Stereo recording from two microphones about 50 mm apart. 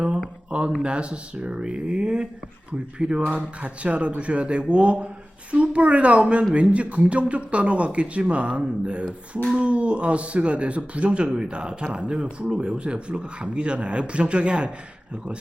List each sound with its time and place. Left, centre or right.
0.8 s speech: right